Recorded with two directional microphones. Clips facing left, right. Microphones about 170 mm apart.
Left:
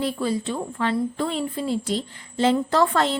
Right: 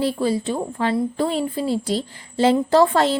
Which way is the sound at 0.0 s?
35° right (ahead or behind).